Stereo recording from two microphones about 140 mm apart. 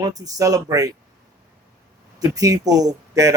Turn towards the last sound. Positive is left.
turn(degrees=-25)  # may be behind; listen again after turning